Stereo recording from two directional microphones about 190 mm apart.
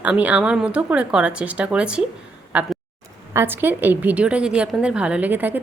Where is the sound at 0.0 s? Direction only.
5° right (ahead or behind).